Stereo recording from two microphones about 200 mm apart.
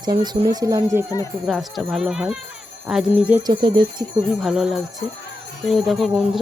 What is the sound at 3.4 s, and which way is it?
Speech, 25° right (ahead or behind).